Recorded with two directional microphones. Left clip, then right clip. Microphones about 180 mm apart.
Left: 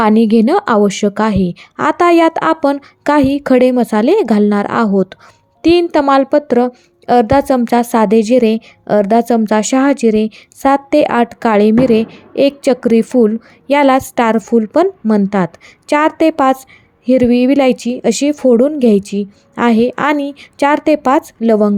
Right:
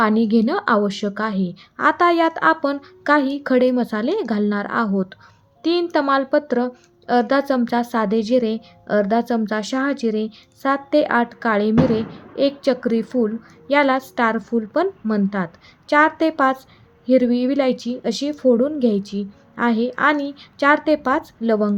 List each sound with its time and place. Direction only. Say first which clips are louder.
0.0 s speech: left 7 dB; 40° left (ahead or behind)